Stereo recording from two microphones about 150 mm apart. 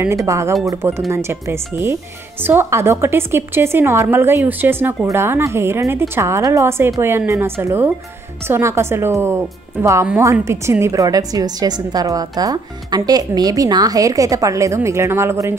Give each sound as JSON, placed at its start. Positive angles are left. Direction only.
{"t": 0.0, "sound": "a woman's voice", "side_deg": -20}